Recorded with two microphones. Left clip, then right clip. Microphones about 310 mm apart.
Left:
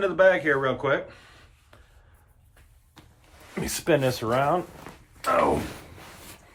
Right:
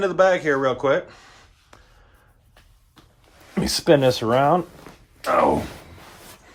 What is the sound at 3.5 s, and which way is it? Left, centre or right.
Speech, right.